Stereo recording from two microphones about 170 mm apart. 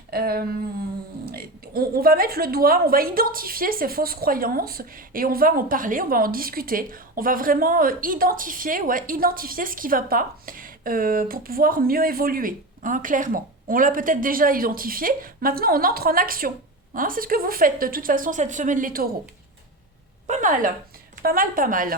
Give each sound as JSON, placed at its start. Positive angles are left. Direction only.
{"t": 0.1, "sound": "speech", "side_deg": -65}